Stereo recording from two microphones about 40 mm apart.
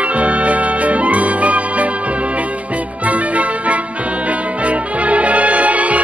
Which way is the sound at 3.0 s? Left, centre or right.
Right.